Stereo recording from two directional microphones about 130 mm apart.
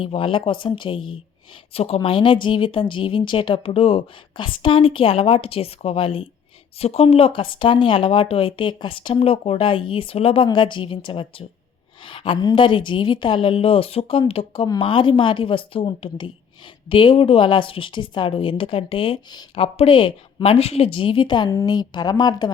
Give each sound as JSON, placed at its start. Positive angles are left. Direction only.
{"t": 0.0, "sound": "a woman's voice", "side_deg": 45}
{"t": 2.0, "sound": "a woman's voice", "side_deg": 40}
{"t": 19.5, "sound": "a woman's voice", "side_deg": 50}